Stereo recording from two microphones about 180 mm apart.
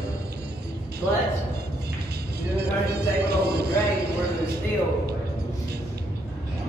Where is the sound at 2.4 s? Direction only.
65° right (ahead or behind).